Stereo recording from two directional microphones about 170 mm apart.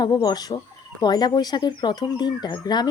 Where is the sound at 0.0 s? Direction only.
25° left (ahead or behind).